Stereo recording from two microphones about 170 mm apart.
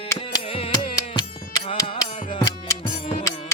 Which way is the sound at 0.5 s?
35° left (ahead or behind).